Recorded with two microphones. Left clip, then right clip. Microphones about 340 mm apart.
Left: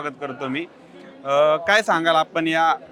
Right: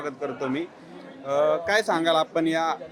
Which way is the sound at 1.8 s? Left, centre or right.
Left.